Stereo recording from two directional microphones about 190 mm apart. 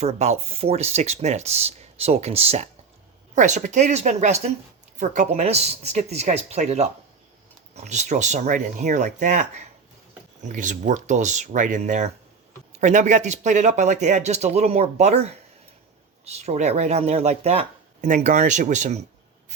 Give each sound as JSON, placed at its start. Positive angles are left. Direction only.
{"t": 0.0, "sound": "speech", "side_deg": -35}